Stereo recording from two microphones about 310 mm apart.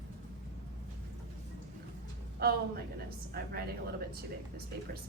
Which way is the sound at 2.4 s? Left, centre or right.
Right.